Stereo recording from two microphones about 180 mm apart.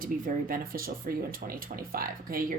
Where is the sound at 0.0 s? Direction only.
50° right (ahead or behind).